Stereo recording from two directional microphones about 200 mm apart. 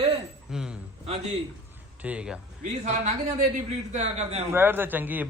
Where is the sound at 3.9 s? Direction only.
35° right (ahead or behind).